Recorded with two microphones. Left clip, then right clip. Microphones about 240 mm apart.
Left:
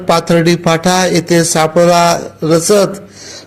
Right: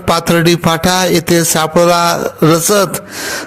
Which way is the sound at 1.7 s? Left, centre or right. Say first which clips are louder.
Left 1 dB; right.